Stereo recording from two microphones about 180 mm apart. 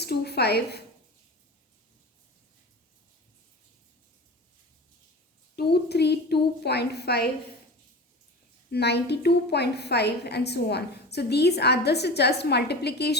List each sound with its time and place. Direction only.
0.0 s a sound: 65° left (ahead or behind)
5.5 s a woman's voice: 65° left (ahead or behind)
8.7 s a woman's voice: 65° left (ahead or behind)